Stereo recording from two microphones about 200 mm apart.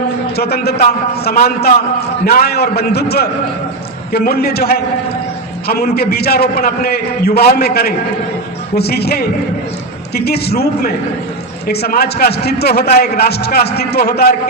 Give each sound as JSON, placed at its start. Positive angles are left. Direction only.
{"t": 0.3, "sound": "a man's voice", "side_deg": 50}